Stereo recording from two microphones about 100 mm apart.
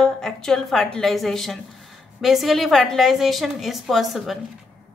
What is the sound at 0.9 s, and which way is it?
A woman's voice, 5° left (ahead or behind).